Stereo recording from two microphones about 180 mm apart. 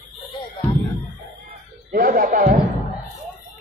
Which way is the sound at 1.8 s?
50° right (ahead or behind).